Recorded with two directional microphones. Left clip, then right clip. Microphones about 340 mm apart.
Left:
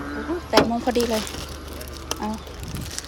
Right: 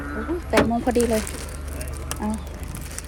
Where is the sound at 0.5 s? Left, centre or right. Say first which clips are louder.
Left 2 dB; centre.